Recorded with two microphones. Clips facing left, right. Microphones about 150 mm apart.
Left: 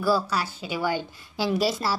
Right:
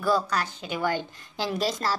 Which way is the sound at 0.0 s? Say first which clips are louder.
Left 1 dB; 5° left (ahead or behind).